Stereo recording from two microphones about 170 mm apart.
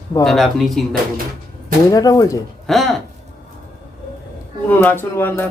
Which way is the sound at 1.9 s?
20° left (ahead or behind).